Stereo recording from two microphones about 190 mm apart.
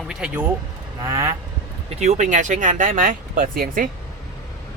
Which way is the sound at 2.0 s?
40° right (ahead or behind).